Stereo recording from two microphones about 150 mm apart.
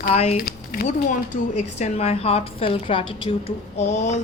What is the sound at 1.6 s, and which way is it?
Speech, 50° left (ahead or behind).